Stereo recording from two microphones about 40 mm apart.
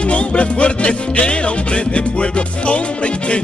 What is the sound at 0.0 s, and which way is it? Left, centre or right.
Music, left.